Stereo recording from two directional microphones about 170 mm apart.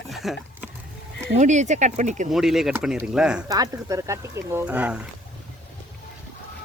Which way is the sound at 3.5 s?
20° right (ahead or behind).